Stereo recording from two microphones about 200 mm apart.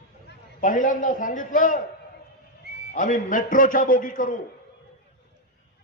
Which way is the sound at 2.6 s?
55° right (ahead or behind).